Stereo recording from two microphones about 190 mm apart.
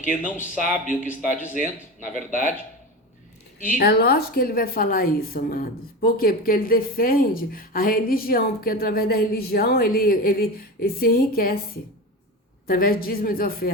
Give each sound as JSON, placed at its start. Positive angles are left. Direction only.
{"t": 0.2, "sound": "speech", "side_deg": -5}
{"t": 0.9, "sound": "a woman's voice", "side_deg": 40}
{"t": 3.6, "sound": "a woman's voice", "side_deg": 50}